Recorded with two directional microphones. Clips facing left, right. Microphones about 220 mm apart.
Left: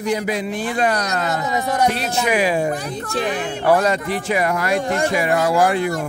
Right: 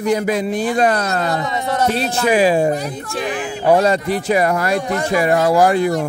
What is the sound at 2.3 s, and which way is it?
Speech, 30° right (ahead or behind).